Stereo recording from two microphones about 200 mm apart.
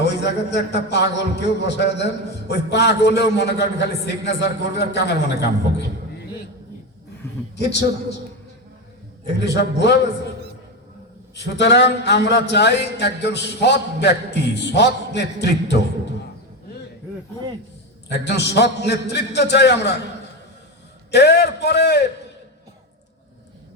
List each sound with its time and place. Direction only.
0.5 s speech: 55° left (ahead or behind)
7.5 s speech: 60° left (ahead or behind)
9.4 s speech: 60° left (ahead or behind)
11.3 s speech: 60° left (ahead or behind)
18.1 s speech: 60° left (ahead or behind)
21.1 s speech: 55° left (ahead or behind)